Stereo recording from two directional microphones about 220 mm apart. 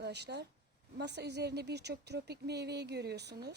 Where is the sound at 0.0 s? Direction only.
50° right (ahead or behind).